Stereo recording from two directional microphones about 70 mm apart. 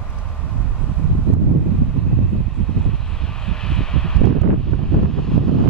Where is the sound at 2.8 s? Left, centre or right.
Centre.